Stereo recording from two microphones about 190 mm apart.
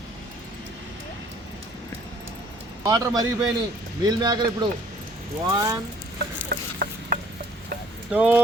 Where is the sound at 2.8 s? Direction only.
20° right (ahead or behind).